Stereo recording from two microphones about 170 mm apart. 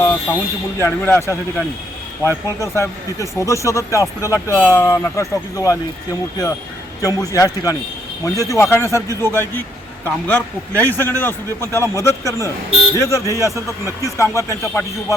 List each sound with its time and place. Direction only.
0.0 s alarm: 10° left (ahead or behind)
0.8 s speech: 15° left (ahead or behind)
7.0 s speech: 20° left (ahead or behind)